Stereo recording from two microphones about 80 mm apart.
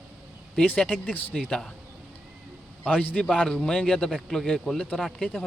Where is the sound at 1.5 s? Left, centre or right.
Centre.